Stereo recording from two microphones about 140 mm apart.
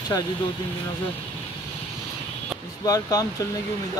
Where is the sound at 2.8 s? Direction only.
25° left (ahead or behind).